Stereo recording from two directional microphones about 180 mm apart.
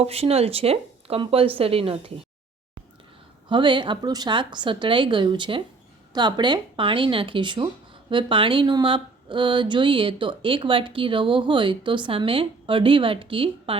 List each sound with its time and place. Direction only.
0.0 s speech: 35° right (ahead or behind)
3.5 s speech: 25° right (ahead or behind)